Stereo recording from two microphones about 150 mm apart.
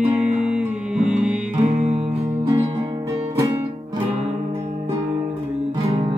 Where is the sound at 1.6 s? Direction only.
45° right (ahead or behind).